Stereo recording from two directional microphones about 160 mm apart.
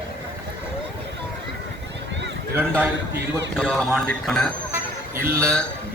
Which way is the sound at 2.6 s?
10° right (ahead or behind).